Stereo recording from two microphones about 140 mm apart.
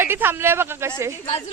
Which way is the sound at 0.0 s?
15° right (ahead or behind).